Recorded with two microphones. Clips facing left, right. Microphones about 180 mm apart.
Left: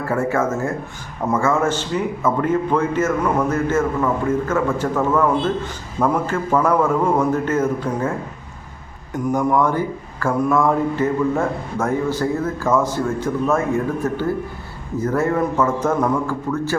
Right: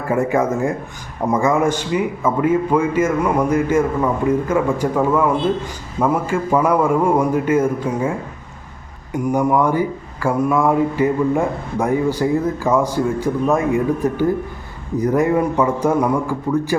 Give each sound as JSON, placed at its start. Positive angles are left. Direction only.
{"t": 0.0, "sound": "speech", "side_deg": -15}
{"t": 9.1, "sound": "speech", "side_deg": -10}